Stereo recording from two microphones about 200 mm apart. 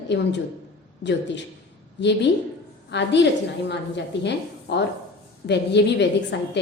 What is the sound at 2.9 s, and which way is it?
A woman's voice, 60° left (ahead or behind).